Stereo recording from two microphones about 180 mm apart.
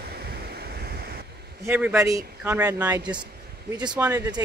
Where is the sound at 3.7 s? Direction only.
25° right (ahead or behind).